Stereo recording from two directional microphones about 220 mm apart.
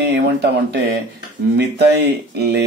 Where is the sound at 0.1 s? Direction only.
50° right (ahead or behind).